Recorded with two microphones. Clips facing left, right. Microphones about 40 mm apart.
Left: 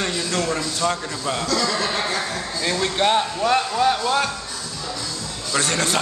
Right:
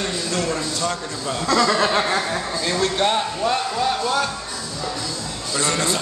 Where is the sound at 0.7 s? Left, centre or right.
Left.